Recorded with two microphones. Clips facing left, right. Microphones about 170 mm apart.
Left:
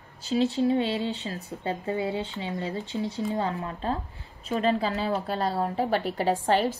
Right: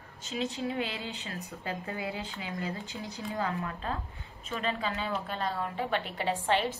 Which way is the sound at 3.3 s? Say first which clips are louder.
Left 4 dB; 35° left (ahead or behind).